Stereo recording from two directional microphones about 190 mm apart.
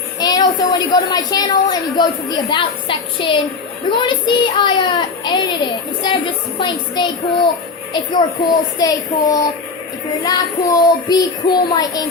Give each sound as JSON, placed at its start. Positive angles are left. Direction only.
{"t": 0.2, "sound": "a woman's voice", "side_deg": 20}
{"t": 6.6, "sound": "a woman's voice", "side_deg": 25}